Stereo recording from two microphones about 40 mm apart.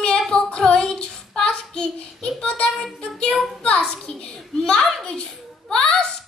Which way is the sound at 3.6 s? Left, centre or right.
Left.